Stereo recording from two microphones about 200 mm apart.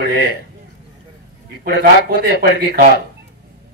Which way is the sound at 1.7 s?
50° right (ahead or behind).